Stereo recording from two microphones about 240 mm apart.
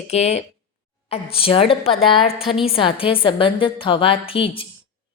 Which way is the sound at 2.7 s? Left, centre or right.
Left.